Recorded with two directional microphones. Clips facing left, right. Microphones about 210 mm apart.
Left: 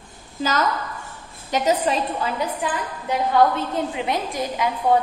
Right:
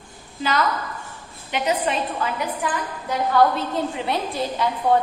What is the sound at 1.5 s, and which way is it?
Speech, 40° left (ahead or behind).